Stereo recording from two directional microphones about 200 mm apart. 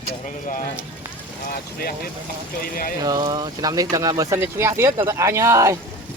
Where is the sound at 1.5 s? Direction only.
50° left (ahead or behind).